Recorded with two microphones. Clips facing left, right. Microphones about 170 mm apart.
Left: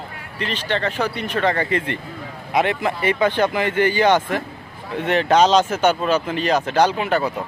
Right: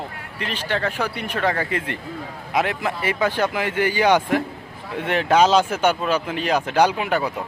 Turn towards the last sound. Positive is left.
turn(degrees=-10)  # may be behind; listen again after turning